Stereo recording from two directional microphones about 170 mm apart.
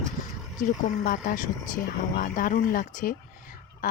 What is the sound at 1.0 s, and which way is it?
Speech, 55° left (ahead or behind).